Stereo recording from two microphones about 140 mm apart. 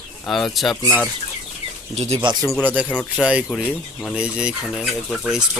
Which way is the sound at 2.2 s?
30° right (ahead or behind).